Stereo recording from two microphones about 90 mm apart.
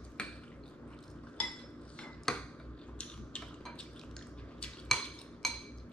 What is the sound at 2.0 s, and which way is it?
Cutlery, 10° left (ahead or behind).